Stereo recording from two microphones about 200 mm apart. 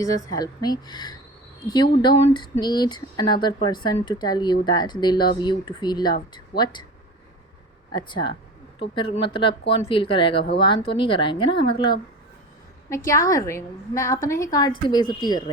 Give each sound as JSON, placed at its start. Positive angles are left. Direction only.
{"t": 0.3, "sound": "speech", "side_deg": 20}
{"t": 6.5, "sound": "speech", "side_deg": 55}
{"t": 7.9, "sound": "speech", "side_deg": 25}
{"t": 13.1, "sound": "a woman's voice", "side_deg": 15}